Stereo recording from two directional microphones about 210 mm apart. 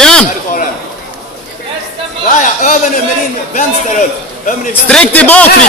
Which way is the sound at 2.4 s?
40° left (ahead or behind).